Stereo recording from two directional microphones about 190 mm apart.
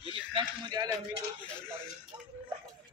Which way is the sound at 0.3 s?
25° right (ahead or behind).